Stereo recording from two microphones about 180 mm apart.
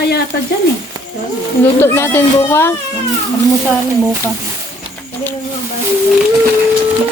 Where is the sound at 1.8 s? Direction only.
10° left (ahead or behind).